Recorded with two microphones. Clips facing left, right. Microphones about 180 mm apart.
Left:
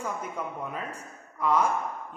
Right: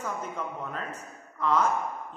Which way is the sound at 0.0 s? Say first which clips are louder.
Even; 10° left (ahead or behind).